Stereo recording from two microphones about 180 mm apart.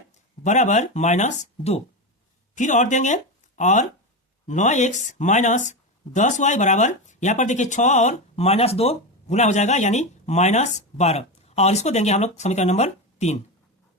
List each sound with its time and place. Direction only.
0.4 s speech: 40° left (ahead or behind)